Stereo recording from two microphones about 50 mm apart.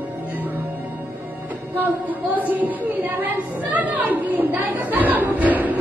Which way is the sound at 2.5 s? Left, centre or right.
Right.